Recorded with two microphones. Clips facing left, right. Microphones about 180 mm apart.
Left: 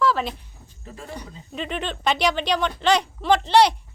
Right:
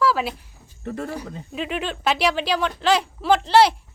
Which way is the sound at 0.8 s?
65° right (ahead or behind).